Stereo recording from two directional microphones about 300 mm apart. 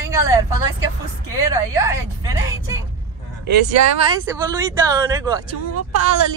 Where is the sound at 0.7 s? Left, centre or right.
Left.